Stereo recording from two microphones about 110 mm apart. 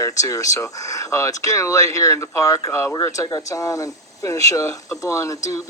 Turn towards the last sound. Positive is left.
turn(degrees=30)  # may be behind; listen again after turning